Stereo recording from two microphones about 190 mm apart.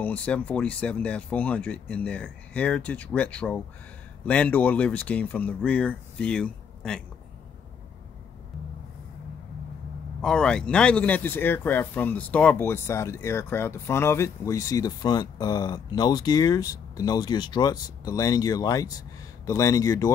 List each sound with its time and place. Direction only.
0.0 s speech: 5° left (ahead or behind)
10.2 s speech: 5° left (ahead or behind)